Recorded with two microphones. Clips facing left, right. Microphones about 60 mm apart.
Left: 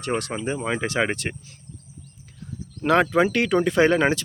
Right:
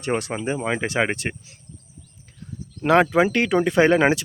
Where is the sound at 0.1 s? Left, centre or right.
Right.